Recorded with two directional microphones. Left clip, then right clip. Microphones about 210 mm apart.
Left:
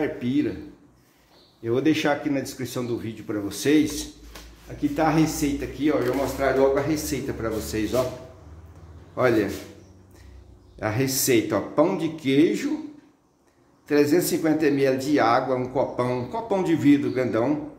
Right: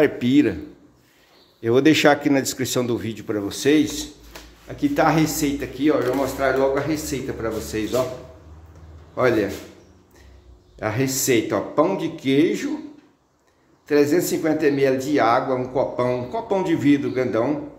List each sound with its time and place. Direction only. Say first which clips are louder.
0.0 s speech: right 8 dB; 35° right (ahead or behind)
1.6 s speech: right 7 dB; 35° right (ahead or behind); by 4.1 s 10° right (ahead or behind)
4.7 s speech: right 3 dB; 20° right (ahead or behind)
6.4 s speech: even; 5° right (ahead or behind)
9.1 s speech: right 2 dB; centre (ahead or behind)
10.8 s speech: right 2 dB; 5° right (ahead or behind)
13.8 s speech: right 2 dB; centre (ahead or behind)